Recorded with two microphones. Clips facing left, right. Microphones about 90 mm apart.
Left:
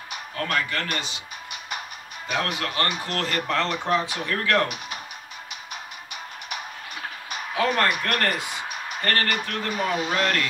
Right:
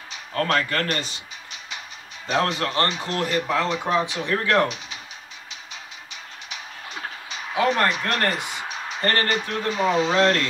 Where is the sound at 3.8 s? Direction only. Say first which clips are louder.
Right 1 dB; 15° right (ahead or behind).